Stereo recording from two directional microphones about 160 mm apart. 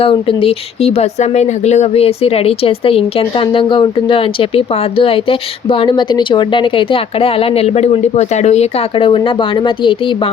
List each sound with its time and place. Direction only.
0.0 s speech: 35° left (ahead or behind)